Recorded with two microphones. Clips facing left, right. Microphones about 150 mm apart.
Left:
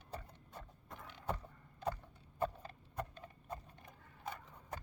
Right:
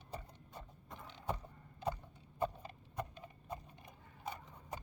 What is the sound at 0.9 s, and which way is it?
Vehicle, 25° right (ahead or behind).